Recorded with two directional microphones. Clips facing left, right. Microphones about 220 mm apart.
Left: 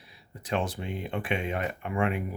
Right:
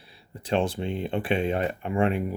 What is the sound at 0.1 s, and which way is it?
Speech, 30° right (ahead or behind).